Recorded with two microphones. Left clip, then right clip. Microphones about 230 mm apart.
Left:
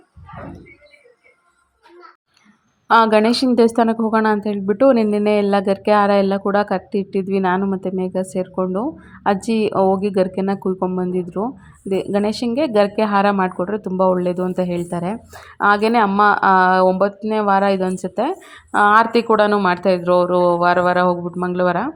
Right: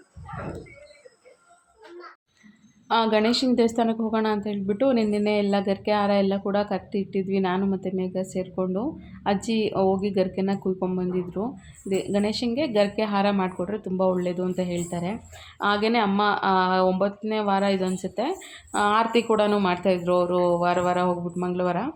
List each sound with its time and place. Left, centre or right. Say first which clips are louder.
2.8 s a woman's voice: left 9 dB; left